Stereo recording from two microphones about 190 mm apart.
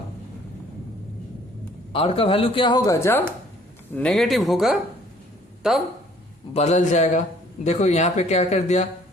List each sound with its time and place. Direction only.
1.9 s speech: 30° left (ahead or behind); by 5.8 s centre (ahead or behind)
6.5 s speech: 35° left (ahead or behind)